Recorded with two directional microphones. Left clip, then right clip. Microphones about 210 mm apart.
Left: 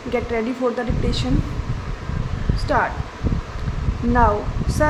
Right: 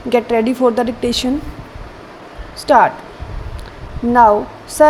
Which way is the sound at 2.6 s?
25° right (ahead or behind).